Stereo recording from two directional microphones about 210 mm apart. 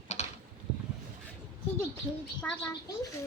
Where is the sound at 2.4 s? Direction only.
5° left (ahead or behind).